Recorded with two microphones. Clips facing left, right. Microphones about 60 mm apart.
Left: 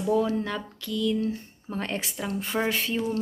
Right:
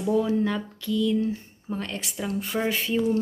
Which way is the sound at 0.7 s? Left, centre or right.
Centre.